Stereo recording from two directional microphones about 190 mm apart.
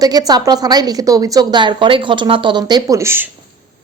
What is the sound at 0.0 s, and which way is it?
A woman's voice, 20° right (ahead or behind).